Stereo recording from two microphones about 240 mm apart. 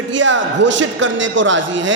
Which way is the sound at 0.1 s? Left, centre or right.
Right.